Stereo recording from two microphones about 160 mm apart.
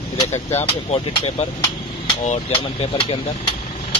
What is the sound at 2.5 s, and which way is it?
Speech, 35° left (ahead or behind).